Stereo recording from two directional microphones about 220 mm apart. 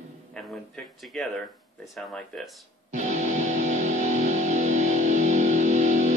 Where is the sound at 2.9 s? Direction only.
30° right (ahead or behind).